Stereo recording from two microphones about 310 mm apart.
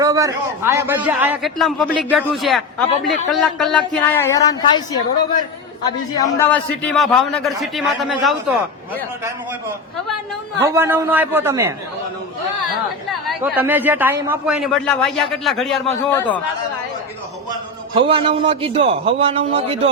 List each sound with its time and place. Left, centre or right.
0.0 s a man's voice: centre
6.1 s a man's voice: centre
10.6 s a man's voice: centre
13.2 s a man's voice: centre
17.5 s a man's voice: centre